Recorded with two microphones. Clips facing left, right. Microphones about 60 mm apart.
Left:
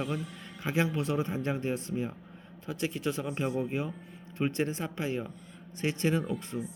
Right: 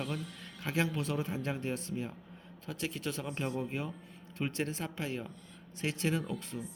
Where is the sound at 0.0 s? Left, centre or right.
Centre.